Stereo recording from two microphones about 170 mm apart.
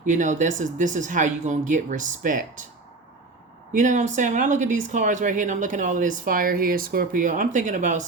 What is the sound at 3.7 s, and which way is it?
Speech, 50° right (ahead or behind).